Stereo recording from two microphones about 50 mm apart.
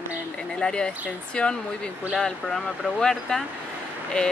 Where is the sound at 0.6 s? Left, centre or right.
Centre.